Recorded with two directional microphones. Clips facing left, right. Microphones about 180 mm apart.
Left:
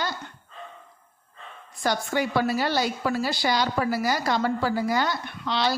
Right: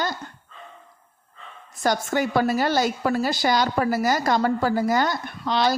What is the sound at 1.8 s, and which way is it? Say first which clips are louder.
A woman's voice: right 3 dB; 45° right (ahead or behind).